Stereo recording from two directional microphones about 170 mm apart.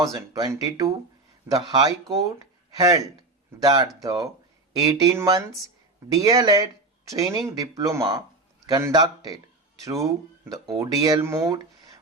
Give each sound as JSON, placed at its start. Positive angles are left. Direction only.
{"t": 0.0, "sound": "speech", "side_deg": -20}